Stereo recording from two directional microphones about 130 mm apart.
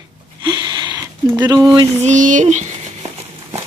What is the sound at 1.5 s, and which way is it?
Speech, 25° right (ahead or behind).